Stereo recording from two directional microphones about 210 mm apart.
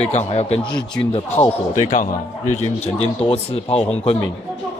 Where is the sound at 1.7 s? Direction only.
35° left (ahead or behind).